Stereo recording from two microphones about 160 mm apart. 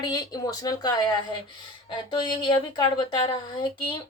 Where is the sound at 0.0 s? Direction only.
25° left (ahead or behind).